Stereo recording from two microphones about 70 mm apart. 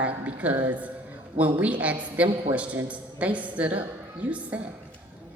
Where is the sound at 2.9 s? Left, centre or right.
Centre.